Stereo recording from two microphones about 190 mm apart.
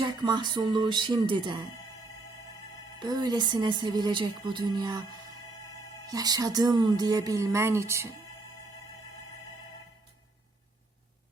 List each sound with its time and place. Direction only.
0.0 s a woman's voice: 25° right (ahead or behind)
3.0 s a woman's voice: 20° right (ahead or behind)
6.1 s a woman's voice: 20° right (ahead or behind)